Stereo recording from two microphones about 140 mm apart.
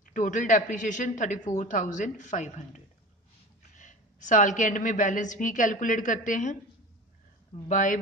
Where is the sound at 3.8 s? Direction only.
65° left (ahead or behind).